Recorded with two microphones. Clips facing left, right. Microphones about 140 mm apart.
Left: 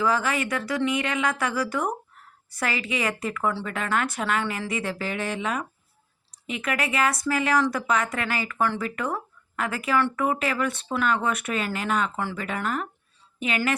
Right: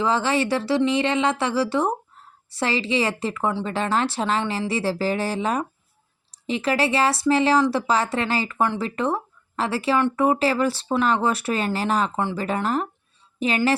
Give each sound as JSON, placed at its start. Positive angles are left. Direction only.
{"t": 0.0, "sound": "a woman's voice", "side_deg": -25}